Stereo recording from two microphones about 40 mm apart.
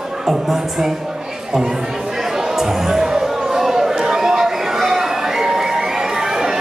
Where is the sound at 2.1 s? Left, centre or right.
Centre.